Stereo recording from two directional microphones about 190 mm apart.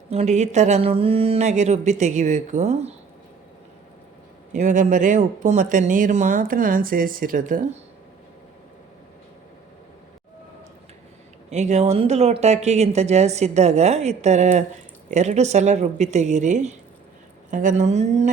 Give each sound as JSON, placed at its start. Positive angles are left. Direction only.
{"t": 0.1, "sound": "speech", "side_deg": -35}
{"t": 4.5, "sound": "speech", "side_deg": -40}
{"t": 11.5, "sound": "speech", "side_deg": -35}